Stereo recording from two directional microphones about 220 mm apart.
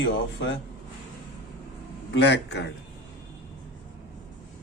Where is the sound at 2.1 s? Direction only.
50° left (ahead or behind).